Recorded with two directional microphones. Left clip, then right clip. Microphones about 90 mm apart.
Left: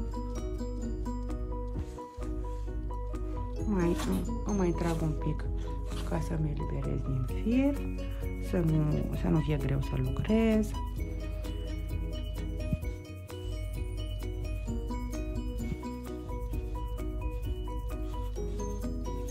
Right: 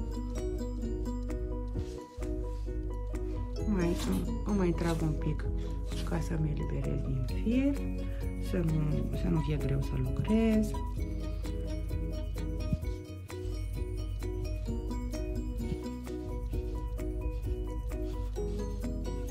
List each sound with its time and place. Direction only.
3.5 s music: centre (ahead or behind)
5.0 s speech: 5° left (ahead or behind)